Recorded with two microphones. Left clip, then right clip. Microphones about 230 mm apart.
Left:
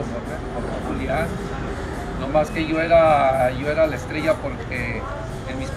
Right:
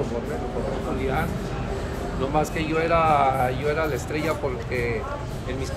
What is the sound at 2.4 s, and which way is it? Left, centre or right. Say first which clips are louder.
Speech: left 4 dB; centre.